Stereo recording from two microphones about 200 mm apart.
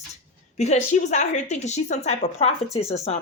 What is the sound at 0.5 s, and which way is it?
A woman's voice, 35° left (ahead or behind).